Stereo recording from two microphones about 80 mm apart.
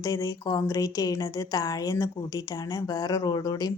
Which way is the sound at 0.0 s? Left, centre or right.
Left.